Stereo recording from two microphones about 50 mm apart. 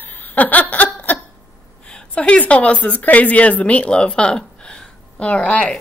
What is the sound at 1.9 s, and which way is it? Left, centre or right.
Speech, left.